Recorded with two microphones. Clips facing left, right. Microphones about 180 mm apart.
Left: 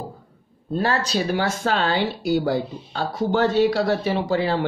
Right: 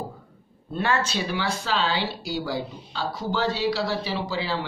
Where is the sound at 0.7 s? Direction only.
35° left (ahead or behind).